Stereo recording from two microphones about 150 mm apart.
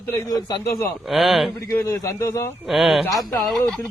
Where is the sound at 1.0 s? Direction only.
Centre (ahead or behind).